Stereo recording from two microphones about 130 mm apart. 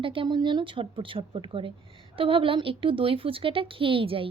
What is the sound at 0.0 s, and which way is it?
A woman's voice, 40° right (ahead or behind).